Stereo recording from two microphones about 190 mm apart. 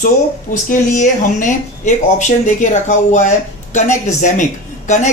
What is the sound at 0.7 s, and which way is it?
Speech, 40° left (ahead or behind).